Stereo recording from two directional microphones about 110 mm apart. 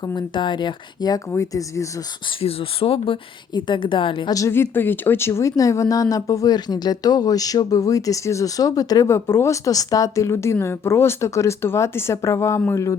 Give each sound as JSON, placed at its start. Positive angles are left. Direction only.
{"t": 0.0, "sound": "speech", "side_deg": 40}
{"t": 1.3, "sound": "speech", "side_deg": 25}
{"t": 2.4, "sound": "a woman's voice", "side_deg": 60}
{"t": 4.3, "sound": "speech", "side_deg": 30}